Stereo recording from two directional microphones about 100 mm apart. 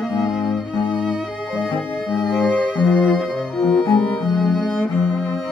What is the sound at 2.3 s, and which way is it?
Music, 15° left (ahead or behind).